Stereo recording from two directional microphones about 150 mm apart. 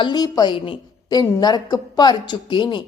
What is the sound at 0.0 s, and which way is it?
A woman's voice, 25° left (ahead or behind).